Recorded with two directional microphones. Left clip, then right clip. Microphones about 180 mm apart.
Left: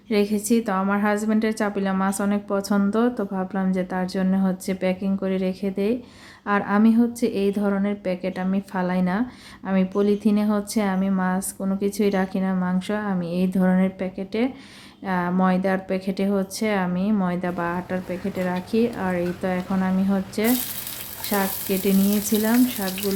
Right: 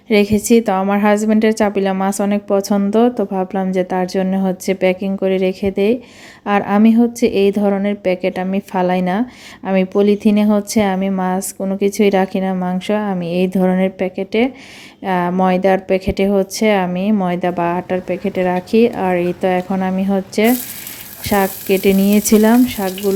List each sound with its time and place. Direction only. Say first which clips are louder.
0.1 s a woman's voice: right 9 dB; 30° right (ahead or behind)